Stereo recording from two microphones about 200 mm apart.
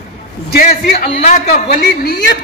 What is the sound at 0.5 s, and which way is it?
A man's voice, 45° left (ahead or behind).